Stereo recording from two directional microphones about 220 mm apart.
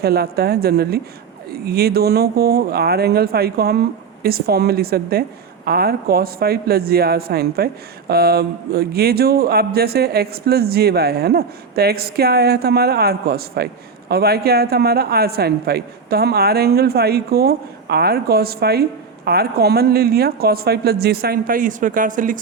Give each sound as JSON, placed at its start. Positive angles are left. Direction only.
{"t": 0.0, "sound": "speech", "side_deg": -45}